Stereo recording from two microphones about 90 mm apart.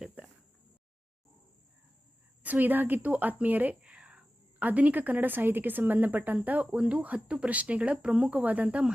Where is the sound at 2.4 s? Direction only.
20° right (ahead or behind).